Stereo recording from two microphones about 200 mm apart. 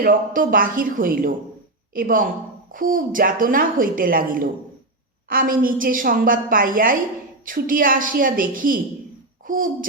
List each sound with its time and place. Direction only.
0.0 s a woman's voice: 45° right (ahead or behind)